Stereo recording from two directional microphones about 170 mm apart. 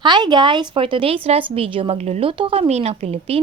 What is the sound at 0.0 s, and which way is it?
A woman's voice, 25° right (ahead or behind).